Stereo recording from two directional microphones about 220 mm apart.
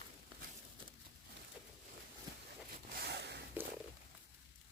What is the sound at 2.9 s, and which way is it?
Zipper, 45° right (ahead or behind).